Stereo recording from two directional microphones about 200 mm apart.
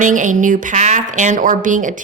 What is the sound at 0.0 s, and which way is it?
A woman's voice, 40° right (ahead or behind).